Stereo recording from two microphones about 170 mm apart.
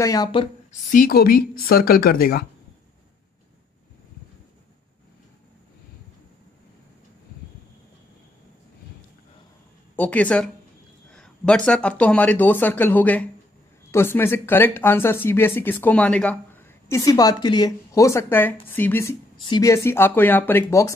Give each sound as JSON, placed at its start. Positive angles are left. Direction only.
{"t": 0.0, "sound": "a woman's voice", "side_deg": 20}
{"t": 0.7, "sound": "speech", "side_deg": 55}
{"t": 9.9, "sound": "speech", "side_deg": 10}